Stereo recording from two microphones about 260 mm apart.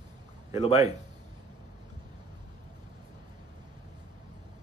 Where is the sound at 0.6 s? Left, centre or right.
Left.